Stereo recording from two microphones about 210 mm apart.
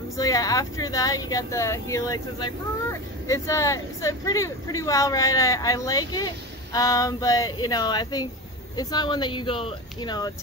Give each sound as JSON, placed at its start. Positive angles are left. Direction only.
{"t": 0.1, "sound": "speech", "side_deg": 15}